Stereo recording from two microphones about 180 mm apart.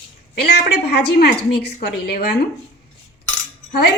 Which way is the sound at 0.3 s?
65° left (ahead or behind).